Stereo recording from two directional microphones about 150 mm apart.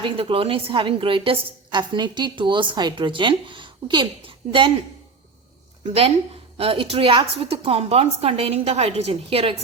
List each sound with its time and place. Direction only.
0.0 s a woman's voice: 35° right (ahead or behind)
5.8 s a woman's voice: 45° right (ahead or behind)